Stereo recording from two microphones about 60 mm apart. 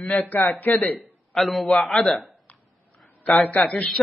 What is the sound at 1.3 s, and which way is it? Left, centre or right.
A man's voice, centre.